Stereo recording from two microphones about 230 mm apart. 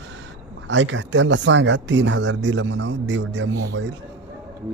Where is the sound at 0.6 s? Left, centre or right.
Right.